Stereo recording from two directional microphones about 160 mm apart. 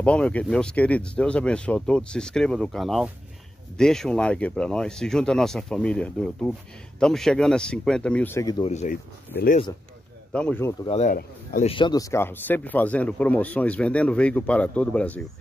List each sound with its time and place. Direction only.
0.0 s speech: 5° left (ahead or behind)
8.6 s speech: 45° left (ahead or behind)
10.3 s speech: 10° left (ahead or behind)
10.9 s speech: 45° left (ahead or behind)
11.6 s speech: 30° left (ahead or behind); by 15.2 s 5° left (ahead or behind)